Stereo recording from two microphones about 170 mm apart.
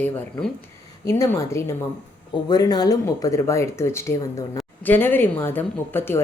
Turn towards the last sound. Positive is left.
turn(degrees=15)  # may be behind; listen again after turning